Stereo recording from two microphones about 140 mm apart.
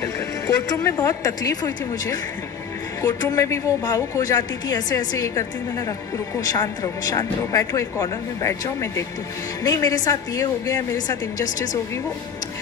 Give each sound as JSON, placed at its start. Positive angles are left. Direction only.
{"t": 0.7, "sound": "a woman's voice", "side_deg": 25}